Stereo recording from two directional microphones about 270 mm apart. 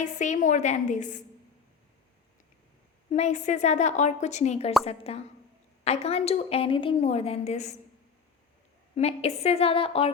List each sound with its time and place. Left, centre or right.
0.0 s a woman's voice: left
3.1 s a woman's voice: left
9.0 s a woman's voice: left